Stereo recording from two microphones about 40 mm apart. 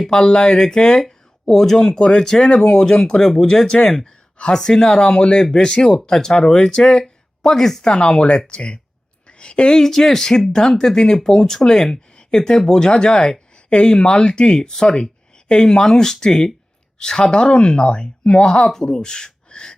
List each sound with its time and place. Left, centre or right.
0.1 s speech: left
7.9 s speech: left
9.2 s a sound: left
9.8 s speech: centre